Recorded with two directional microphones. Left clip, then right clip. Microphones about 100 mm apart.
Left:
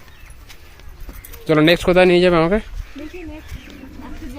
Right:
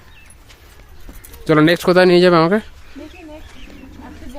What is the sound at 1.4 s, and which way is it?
Speech, 70° right (ahead or behind).